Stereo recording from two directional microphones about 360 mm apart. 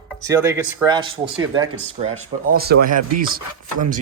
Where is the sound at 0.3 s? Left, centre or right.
Centre.